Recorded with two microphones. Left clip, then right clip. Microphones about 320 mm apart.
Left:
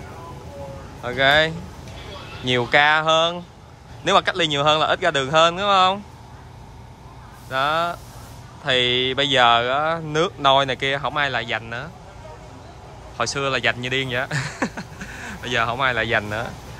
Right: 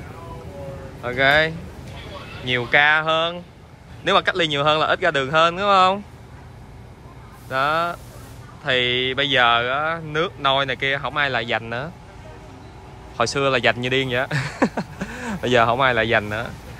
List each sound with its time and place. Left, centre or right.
1.0 s speech: centre
7.4 s speech: centre
13.2 s speech: centre